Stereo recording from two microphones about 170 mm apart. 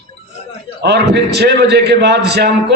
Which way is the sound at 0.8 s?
80° right.